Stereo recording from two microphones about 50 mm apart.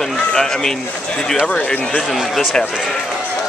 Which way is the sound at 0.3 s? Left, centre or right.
Centre.